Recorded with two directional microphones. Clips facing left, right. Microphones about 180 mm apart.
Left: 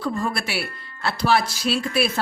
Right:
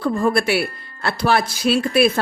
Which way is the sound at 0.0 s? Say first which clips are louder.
Right 7 dB; 55° right (ahead or behind).